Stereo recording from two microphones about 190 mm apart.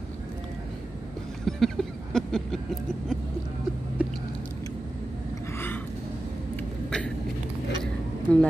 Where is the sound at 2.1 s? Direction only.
5° left (ahead or behind).